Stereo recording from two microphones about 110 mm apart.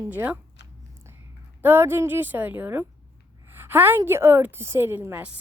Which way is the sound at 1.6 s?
20° right (ahead or behind).